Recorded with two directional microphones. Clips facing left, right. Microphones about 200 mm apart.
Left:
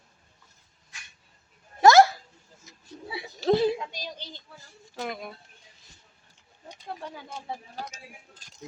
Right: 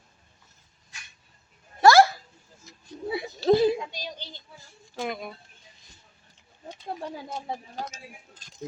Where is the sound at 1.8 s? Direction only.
20° left (ahead or behind).